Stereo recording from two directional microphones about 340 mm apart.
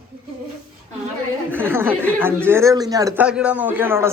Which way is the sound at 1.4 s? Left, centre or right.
Centre.